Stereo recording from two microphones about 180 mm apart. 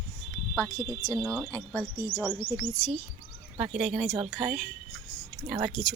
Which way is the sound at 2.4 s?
15° left (ahead or behind).